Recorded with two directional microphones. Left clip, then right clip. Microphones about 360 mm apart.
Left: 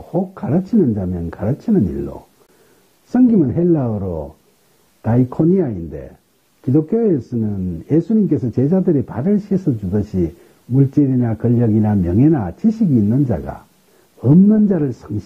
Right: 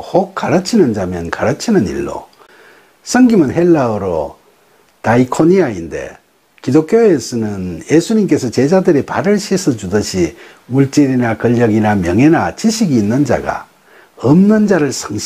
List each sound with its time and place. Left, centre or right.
0.0 s speech: centre